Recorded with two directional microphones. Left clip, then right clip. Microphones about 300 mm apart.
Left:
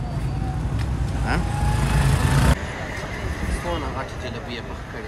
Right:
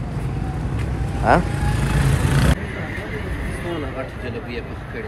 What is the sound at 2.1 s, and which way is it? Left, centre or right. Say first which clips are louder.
Music: even; left.